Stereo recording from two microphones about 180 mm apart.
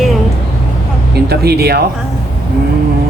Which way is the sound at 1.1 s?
60° right (ahead or behind).